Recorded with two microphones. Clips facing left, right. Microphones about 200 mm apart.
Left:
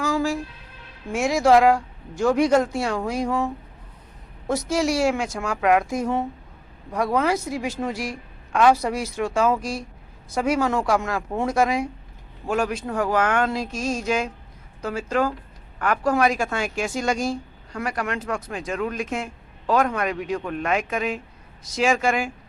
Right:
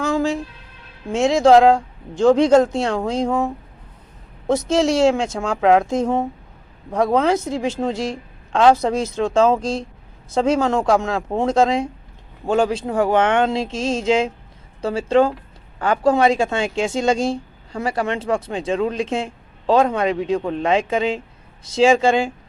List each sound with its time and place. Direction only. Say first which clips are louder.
1.1 s speech: right 5 dB; 20° right (ahead or behind)